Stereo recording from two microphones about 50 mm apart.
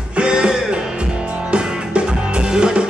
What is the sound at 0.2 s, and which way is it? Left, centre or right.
Music, centre.